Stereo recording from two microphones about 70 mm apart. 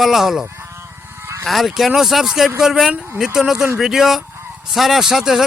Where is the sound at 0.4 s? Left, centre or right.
Right.